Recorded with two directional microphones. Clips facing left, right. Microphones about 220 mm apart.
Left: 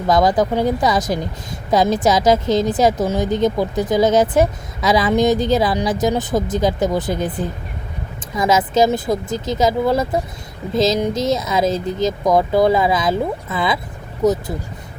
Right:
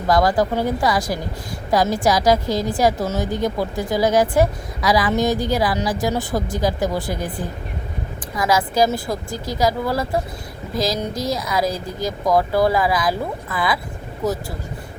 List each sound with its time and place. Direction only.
0.1 s speech: 20° left (ahead or behind)